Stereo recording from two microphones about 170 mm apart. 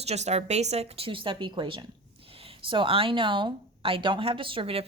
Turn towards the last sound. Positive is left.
turn(degrees=-30)  # may be behind; listen again after turning